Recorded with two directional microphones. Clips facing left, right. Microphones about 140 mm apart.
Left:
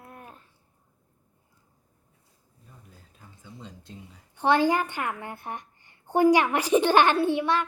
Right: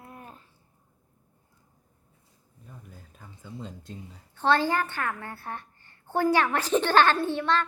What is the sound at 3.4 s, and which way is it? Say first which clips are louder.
Speech: right 5 dB; 50° right (ahead or behind).